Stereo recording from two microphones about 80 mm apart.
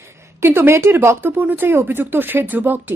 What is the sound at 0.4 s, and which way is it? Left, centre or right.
Speech, right.